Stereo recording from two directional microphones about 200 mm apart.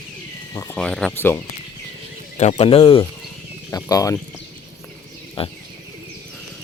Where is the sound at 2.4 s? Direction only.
35° left (ahead or behind).